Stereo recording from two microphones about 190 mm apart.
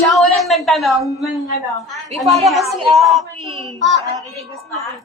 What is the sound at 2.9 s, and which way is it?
Speech, centre (ahead or behind).